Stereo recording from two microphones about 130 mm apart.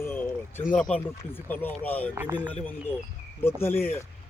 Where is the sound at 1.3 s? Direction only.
15° left (ahead or behind).